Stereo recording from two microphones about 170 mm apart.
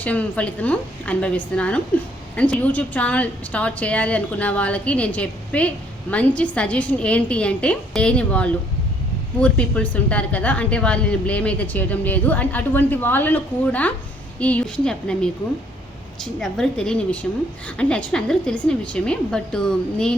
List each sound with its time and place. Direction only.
0.0 s a woman's voice: 10° left (ahead or behind)
16.4 s a woman's voice: 5° left (ahead or behind)